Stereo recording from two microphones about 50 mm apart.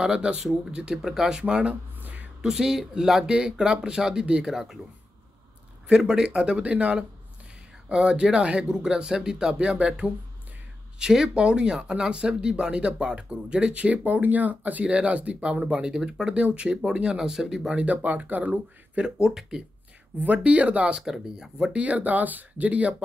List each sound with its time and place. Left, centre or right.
0.0 s speech: centre
1.4 s speech: right
2.4 s speech: centre
5.9 s speech: centre
15.6 s speech: centre
17.7 s speech: right
19.2 s speech: centre
20.2 s speech: right
21.0 s speech: centre
21.7 s speech: right